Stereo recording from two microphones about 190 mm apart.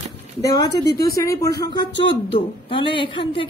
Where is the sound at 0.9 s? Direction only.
20° left (ahead or behind).